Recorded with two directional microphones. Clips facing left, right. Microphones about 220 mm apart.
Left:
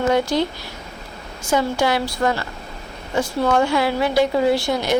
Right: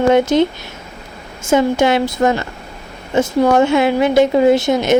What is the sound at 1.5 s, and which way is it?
Speech, 25° right (ahead or behind).